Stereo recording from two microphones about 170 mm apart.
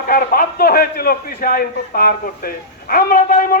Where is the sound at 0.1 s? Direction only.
60° left (ahead or behind).